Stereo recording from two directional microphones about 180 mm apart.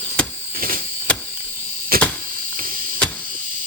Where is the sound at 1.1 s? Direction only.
5° left (ahead or behind).